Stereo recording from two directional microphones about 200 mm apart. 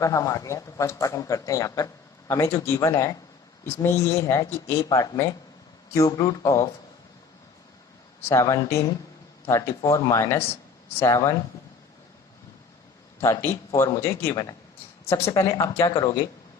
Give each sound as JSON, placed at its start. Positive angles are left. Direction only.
{"t": 0.0, "sound": "a man's voice", "side_deg": 15}
{"t": 8.3, "sound": "a man's voice", "side_deg": 15}
{"t": 13.2, "sound": "a man's voice", "side_deg": 15}